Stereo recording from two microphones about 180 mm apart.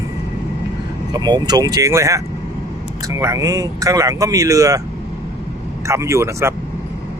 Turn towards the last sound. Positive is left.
turn(degrees=-15)  # may be behind; listen again after turning